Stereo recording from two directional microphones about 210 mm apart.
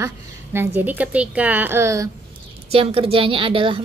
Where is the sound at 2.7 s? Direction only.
25° right (ahead or behind).